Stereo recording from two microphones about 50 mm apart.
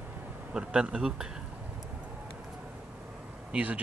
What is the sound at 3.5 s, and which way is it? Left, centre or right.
Speech, right.